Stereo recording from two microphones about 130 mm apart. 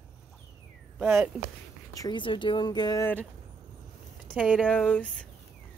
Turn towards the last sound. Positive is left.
turn(degrees=10)  # may be behind; listen again after turning